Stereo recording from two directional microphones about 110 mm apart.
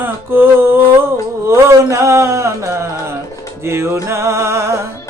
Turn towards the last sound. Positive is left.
turn(degrees=-25)  # may be behind; listen again after turning